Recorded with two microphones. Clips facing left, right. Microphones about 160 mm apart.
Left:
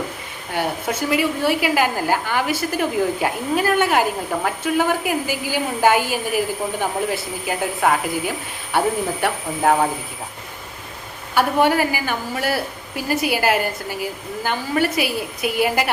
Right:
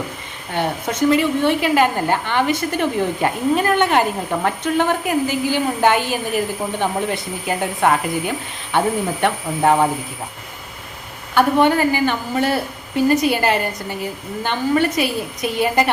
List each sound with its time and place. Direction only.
0.5 s a woman's voice: 5° left (ahead or behind)
11.3 s a woman's voice: 5° left (ahead or behind)